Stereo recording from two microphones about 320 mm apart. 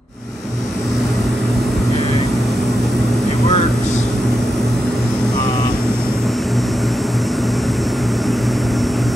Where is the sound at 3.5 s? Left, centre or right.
Left.